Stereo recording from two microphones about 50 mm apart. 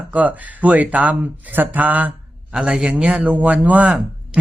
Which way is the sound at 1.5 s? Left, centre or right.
Right.